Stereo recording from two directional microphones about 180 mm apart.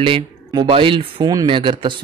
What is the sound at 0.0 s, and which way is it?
Speech, 25° right (ahead or behind).